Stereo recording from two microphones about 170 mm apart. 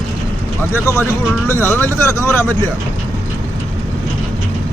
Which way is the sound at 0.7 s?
15° left (ahead or behind).